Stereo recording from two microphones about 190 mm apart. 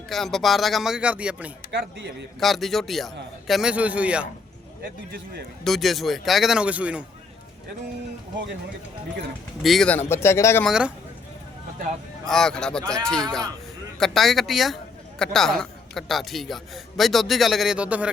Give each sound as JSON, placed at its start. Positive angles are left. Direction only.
{"t": 0.1, "sound": "a man's voice", "side_deg": 0}
{"t": 5.1, "sound": "speech", "side_deg": -55}
{"t": 5.6, "sound": "a man's voice", "side_deg": 0}
{"t": 9.6, "sound": "speech", "side_deg": 5}
{"t": 10.7, "sound": "a man's voice", "side_deg": -5}
{"t": 12.2, "sound": "a man's voice", "side_deg": 0}